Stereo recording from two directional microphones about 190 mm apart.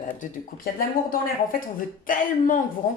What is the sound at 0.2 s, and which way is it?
Speech, 50° left (ahead or behind).